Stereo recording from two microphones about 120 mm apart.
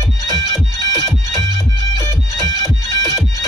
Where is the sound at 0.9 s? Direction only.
25° left (ahead or behind).